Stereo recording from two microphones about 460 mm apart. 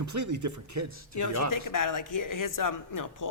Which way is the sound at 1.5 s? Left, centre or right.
Left.